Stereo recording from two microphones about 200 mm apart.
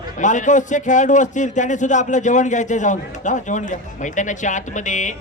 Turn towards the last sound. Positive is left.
turn(degrees=40)  # may be behind; listen again after turning